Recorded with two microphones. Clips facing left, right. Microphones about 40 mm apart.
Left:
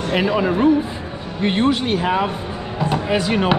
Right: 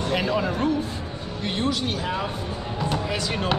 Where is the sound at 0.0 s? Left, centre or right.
Centre.